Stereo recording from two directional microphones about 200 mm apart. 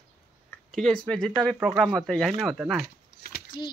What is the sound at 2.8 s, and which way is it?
Keys jangling, 50° left (ahead or behind).